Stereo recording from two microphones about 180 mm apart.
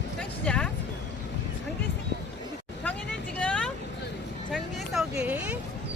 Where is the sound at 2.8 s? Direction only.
5° left (ahead or behind).